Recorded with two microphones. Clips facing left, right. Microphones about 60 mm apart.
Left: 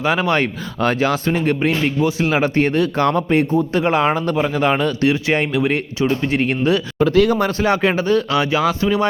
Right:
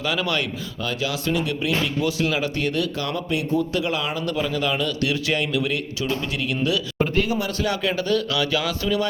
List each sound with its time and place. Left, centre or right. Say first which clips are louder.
0.0 s a man's voice: left 7 dB; left
0.8 s a man's voice: left 10 dB; left
2.0 s a man's voice: left 5 dB; left
7.1 s speech: left 11 dB; left
7.3 s a man's voice: left 7 dB; left